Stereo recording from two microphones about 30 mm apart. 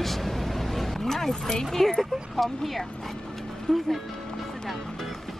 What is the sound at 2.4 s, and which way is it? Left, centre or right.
Speech, centre.